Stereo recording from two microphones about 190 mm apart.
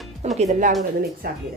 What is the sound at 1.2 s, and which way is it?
Speech, 50° right (ahead or behind).